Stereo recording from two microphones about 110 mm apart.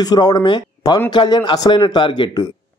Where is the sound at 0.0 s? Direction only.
40° left (ahead or behind).